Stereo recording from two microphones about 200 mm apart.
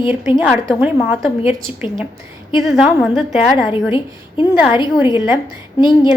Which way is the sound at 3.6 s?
25° left (ahead or behind).